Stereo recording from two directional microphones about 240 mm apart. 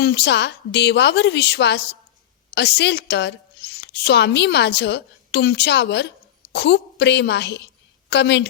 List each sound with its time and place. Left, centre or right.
0.0 s a woman's voice: left